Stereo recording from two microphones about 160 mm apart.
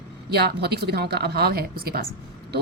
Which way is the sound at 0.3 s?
85° right.